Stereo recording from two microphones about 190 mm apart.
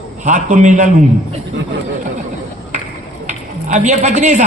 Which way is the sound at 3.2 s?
40° right (ahead or behind).